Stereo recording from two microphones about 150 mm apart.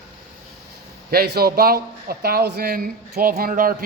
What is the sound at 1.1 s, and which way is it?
Speech, 90° right.